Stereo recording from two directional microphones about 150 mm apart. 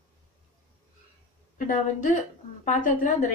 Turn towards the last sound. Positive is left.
turn(degrees=55)  # may be behind; listen again after turning